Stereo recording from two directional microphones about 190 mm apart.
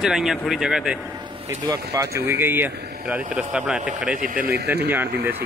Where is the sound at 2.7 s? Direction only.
60° right (ahead or behind).